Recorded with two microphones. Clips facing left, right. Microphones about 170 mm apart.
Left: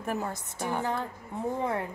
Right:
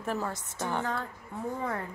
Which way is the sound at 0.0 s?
15° left (ahead or behind).